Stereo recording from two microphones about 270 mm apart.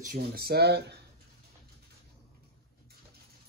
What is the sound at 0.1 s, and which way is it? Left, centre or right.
Speech, right.